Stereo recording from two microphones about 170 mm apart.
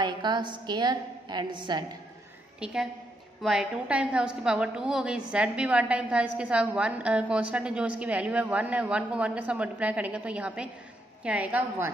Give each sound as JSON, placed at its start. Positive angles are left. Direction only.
{"t": 0.0, "sound": "a woman's voice", "side_deg": -25}
{"t": 2.6, "sound": "a woman's voice", "side_deg": -5}